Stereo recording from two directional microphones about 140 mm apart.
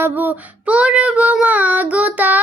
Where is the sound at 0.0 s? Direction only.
10° right (ahead or behind).